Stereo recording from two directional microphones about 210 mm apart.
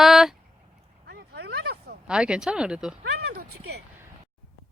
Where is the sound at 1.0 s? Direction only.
50° right (ahead or behind).